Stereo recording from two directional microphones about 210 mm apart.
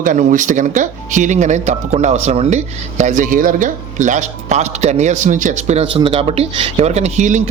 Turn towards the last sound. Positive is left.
turn(degrees=-35)  # may be behind; listen again after turning